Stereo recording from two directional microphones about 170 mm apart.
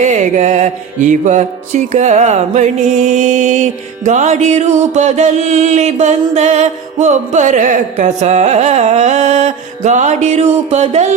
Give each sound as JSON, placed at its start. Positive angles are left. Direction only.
{"t": 0.0, "sound": "mantra", "side_deg": -45}